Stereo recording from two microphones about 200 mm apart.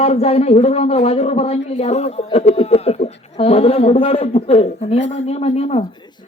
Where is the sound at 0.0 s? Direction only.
30° left (ahead or behind).